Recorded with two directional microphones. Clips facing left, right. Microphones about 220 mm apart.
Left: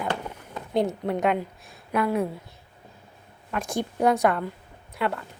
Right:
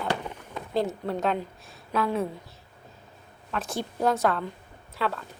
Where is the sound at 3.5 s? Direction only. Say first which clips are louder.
Left 3 dB; 15° left (ahead or behind).